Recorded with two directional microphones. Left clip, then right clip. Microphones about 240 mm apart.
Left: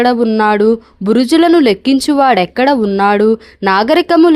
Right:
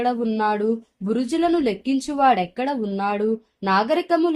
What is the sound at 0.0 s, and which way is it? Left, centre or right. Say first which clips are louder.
Speech: left 11 dB; left.